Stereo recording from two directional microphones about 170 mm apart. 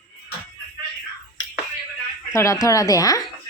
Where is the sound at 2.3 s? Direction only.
15° left (ahead or behind).